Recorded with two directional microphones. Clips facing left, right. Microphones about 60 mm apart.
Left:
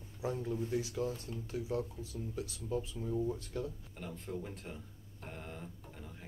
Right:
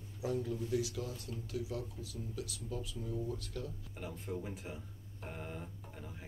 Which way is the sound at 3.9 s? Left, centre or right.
Centre.